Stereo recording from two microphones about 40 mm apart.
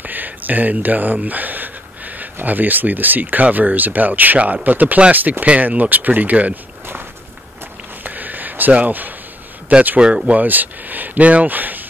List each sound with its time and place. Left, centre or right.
0.0 s a sound: right
2.4 s speech: right
8.0 s a sound: right
8.7 s speech: right
9.9 s speech: centre
10.2 s speech: right